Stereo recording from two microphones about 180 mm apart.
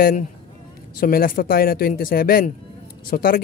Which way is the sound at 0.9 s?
55° left (ahead or behind).